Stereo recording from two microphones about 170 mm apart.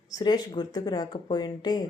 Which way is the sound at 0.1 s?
25° left (ahead or behind).